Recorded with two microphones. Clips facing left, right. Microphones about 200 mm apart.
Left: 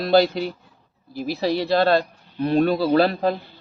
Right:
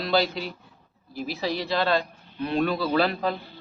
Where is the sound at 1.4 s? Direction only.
35° left (ahead or behind).